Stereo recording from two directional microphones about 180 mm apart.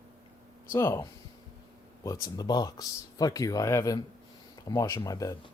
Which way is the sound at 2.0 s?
20° left (ahead or behind).